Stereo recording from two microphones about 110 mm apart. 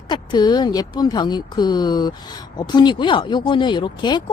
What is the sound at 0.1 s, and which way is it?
A woman's voice, 40° left (ahead or behind).